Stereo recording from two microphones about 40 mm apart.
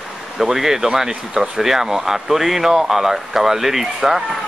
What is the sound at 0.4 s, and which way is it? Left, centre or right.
Speech, centre.